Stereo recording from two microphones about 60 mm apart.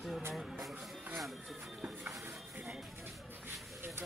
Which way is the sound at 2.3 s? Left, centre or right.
Centre.